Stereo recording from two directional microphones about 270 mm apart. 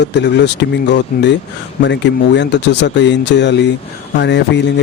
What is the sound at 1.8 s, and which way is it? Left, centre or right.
Speech, left.